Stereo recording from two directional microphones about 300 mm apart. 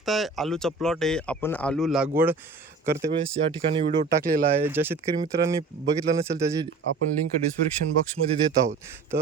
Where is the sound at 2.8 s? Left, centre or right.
Right.